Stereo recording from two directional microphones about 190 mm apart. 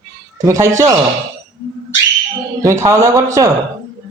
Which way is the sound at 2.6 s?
15° right (ahead or behind).